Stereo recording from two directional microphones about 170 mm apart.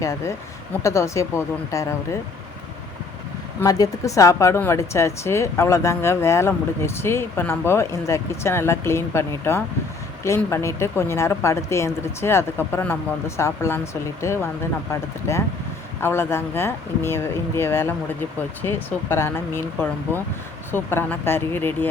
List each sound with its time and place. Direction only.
0.0 s a woman's voice: 15° left (ahead or behind)
3.6 s a woman's voice: 20° left (ahead or behind)
16.0 s a woman's voice: 15° left (ahead or behind)